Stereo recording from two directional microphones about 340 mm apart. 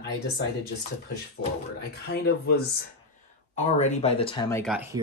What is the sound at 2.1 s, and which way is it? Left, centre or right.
Speech, left.